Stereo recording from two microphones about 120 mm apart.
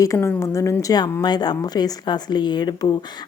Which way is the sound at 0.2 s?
15° left (ahead or behind).